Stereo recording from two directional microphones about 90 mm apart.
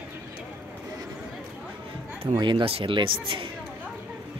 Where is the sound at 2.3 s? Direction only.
65° right (ahead or behind).